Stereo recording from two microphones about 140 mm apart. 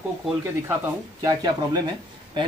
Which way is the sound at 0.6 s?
15° right (ahead or behind).